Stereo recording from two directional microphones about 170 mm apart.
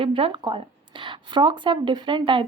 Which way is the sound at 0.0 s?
30° right (ahead or behind).